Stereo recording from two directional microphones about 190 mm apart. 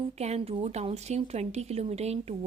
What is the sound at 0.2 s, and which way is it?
Speech, 35° right (ahead or behind).